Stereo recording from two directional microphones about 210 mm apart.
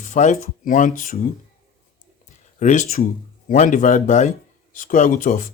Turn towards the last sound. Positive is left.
turn(degrees=40)  # may be behind; listen again after turning